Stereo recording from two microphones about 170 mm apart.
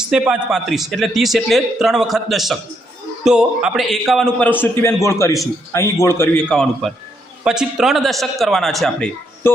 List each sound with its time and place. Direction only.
0.1 s a man's voice: 5° right (ahead or behind)